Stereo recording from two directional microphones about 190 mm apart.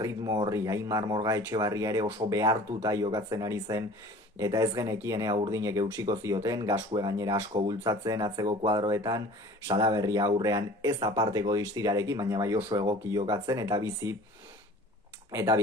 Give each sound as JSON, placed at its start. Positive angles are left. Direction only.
{"t": 0.0, "sound": "speech", "side_deg": -20}
{"t": 15.3, "sound": "speech", "side_deg": -15}